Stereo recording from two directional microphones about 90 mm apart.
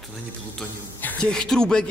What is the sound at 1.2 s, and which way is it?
Speech, 10° left (ahead or behind).